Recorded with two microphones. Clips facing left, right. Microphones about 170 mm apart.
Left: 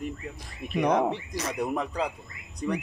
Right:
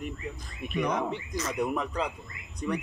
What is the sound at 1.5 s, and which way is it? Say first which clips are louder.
Speech: even; 35° left (ahead or behind).